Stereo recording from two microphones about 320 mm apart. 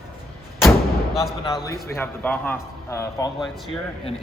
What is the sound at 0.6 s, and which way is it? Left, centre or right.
Artillery fire, centre.